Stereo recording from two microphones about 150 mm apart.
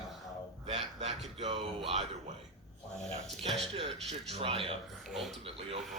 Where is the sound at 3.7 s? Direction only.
40° right (ahead or behind).